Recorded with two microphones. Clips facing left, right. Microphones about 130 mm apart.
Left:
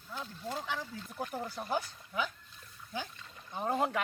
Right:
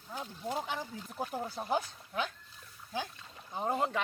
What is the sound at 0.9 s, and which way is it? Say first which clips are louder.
Speech: right 1 dB; 20° right (ahead or behind).